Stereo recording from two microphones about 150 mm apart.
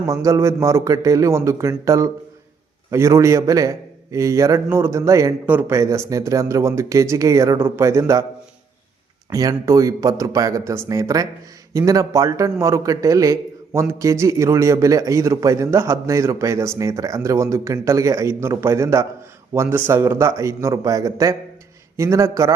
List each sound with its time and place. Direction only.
0.0 s a man's voice: 20° right (ahead or behind)
9.3 s a man's voice: 25° right (ahead or behind)